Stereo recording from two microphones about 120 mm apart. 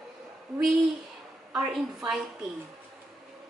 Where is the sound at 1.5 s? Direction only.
5° right (ahead or behind).